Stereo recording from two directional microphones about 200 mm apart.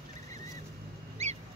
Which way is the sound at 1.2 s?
30° right (ahead or behind).